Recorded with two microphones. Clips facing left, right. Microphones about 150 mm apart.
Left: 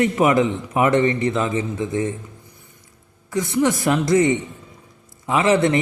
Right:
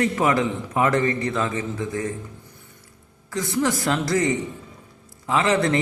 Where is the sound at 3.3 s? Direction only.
20° left (ahead or behind).